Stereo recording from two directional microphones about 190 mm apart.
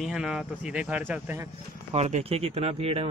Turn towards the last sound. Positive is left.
turn(degrees=-30)  # may be behind; listen again after turning